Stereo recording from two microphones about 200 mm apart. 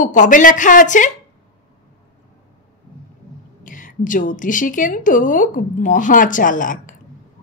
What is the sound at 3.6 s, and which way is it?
A woman's voice, 40° left (ahead or behind).